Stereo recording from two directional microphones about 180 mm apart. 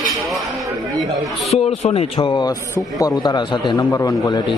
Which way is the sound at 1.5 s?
35° left (ahead or behind).